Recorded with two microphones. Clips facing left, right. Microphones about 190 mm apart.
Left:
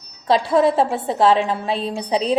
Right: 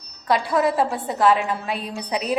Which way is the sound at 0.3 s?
25° left (ahead or behind).